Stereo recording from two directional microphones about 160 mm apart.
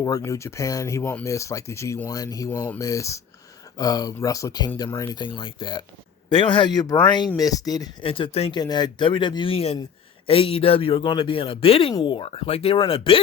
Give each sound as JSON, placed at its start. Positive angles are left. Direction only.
{"t": 0.0, "sound": "speech", "side_deg": 20}
{"t": 8.0, "sound": "speech", "side_deg": 35}
{"t": 8.5, "sound": "speech", "side_deg": 25}